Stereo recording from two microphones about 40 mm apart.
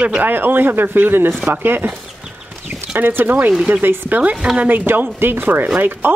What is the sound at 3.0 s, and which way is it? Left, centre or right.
Speech, right.